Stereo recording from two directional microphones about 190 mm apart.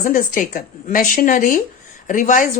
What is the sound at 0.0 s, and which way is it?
Speech, 45° left (ahead or behind).